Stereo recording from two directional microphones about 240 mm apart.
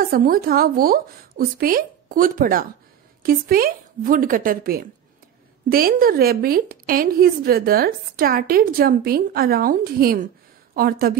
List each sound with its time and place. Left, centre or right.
0.0 s a woman's voice: right